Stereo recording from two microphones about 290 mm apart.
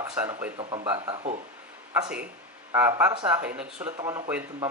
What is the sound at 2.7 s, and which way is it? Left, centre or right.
Speech, centre.